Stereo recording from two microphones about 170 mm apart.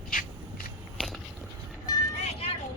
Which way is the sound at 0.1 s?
55° left (ahead or behind).